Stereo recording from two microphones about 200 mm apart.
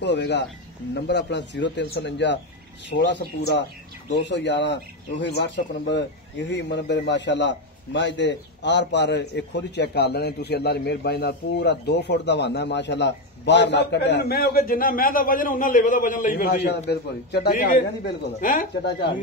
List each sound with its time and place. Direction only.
0.0 s a man's voice: 60° left (ahead or behind)